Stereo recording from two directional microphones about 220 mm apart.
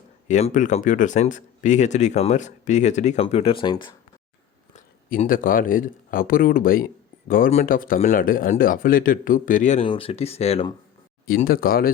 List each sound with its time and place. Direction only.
0.3 s speech: 30° left (ahead or behind)
4.7 s speech: 40° left (ahead or behind)
11.3 s speech: 40° left (ahead or behind)